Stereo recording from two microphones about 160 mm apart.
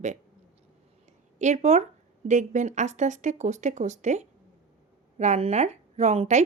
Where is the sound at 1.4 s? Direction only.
45° right (ahead or behind).